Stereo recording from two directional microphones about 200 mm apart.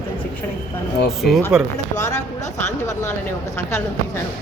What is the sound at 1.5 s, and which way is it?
Speech, 5° right (ahead or behind).